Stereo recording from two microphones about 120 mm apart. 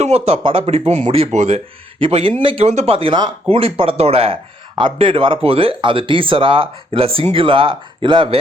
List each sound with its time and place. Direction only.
0.0 s speech: 60° right (ahead or behind)
2.6 s speech: 60° right (ahead or behind); by 8.4 s 45° right (ahead or behind)